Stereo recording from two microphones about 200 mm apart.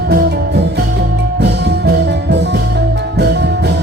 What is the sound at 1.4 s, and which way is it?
Music, 55° right (ahead or behind).